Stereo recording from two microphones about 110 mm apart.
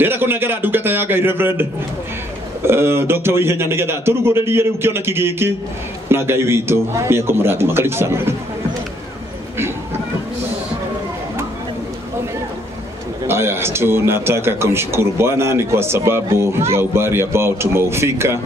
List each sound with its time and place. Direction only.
0.0 s speech: 20° right (ahead or behind)
13.3 s speech: 20° right (ahead or behind)